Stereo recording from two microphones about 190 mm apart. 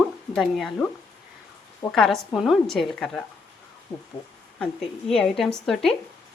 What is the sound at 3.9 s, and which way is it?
Speech, 30° left (ahead or behind).